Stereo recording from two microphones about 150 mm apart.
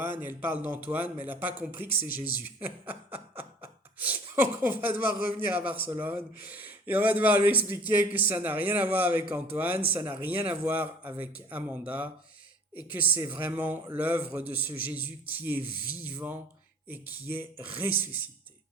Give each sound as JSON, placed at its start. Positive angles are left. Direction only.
{"t": 0.0, "sound": "a man's voice", "side_deg": -15}
{"t": 15.7, "sound": "speech", "side_deg": 80}
{"t": 16.0, "sound": "a man's voice", "side_deg": -10}